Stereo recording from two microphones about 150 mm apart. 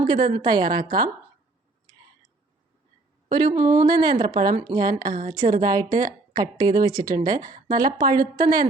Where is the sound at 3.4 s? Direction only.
55° right (ahead or behind).